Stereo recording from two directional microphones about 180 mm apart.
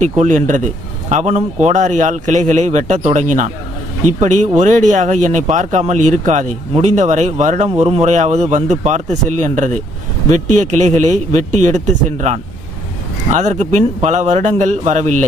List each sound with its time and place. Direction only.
0.0 s speech: 45° right (ahead or behind)